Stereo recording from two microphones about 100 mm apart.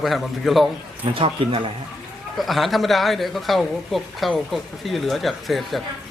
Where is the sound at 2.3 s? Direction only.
Centre (ahead or behind).